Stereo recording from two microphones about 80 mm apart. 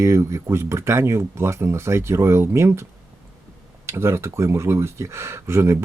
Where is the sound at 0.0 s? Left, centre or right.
Right.